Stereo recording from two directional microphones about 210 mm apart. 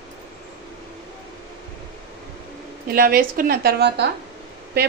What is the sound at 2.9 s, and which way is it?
A woman's voice, 45° right (ahead or behind).